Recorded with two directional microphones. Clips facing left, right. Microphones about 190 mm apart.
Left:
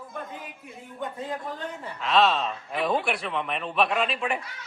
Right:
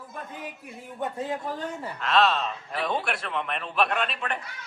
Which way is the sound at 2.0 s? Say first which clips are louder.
Left 1 dB; centre (ahead or behind).